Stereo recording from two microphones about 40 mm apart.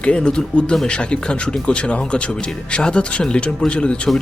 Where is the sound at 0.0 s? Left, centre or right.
Left.